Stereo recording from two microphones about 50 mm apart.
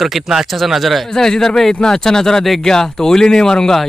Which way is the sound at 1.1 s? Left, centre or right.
Centre.